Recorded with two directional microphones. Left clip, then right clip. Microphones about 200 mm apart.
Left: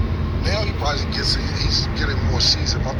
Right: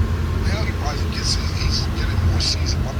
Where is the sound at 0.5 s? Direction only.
50° left (ahead or behind).